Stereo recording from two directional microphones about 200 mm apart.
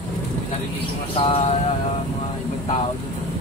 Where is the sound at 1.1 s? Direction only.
30° left (ahead or behind).